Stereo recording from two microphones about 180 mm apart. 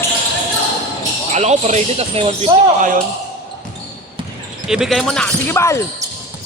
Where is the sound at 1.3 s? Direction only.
40° right (ahead or behind).